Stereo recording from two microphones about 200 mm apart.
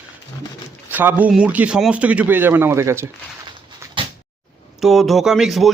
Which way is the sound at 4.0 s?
25° right (ahead or behind).